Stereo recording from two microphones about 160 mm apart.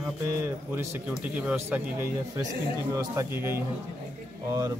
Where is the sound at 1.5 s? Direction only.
15° right (ahead or behind).